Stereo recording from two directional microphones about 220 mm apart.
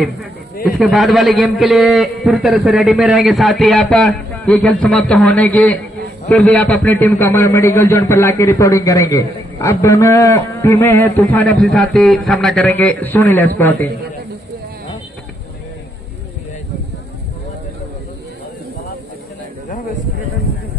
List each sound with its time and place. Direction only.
0.7 s a man's voice: centre (ahead or behind)